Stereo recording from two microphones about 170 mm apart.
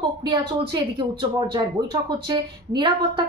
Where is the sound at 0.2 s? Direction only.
25° right (ahead or behind).